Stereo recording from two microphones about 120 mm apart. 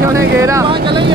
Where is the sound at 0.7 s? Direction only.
40° right (ahead or behind).